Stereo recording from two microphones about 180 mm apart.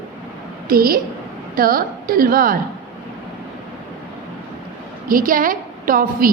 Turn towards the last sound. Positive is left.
turn(degrees=-50)  # may be behind; listen again after turning